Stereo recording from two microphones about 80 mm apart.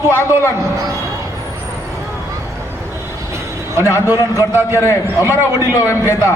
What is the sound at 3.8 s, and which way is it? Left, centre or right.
A man's voice, left.